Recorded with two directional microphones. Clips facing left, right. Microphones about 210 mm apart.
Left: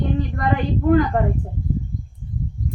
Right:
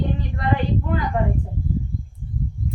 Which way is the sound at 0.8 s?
50° left (ahead or behind).